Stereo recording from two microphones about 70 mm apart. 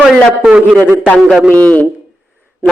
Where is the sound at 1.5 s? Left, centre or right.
Left.